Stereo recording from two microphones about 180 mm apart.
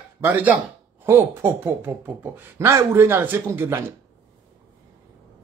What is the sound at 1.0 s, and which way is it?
Speech, 15° right (ahead or behind).